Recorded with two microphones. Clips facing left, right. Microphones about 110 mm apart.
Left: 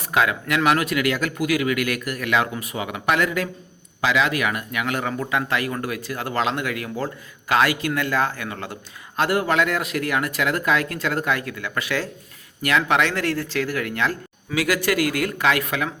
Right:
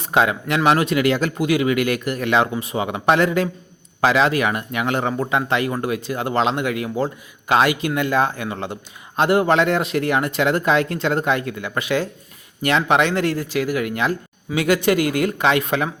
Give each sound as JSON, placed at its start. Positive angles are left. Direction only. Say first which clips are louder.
{"t": 0.0, "sound": "speech", "louder": "right 3 dB", "side_deg": -25}